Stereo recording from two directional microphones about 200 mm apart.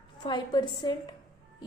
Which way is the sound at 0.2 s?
20° left (ahead or behind).